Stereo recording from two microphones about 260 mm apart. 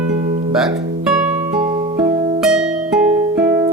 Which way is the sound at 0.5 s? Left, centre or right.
Centre.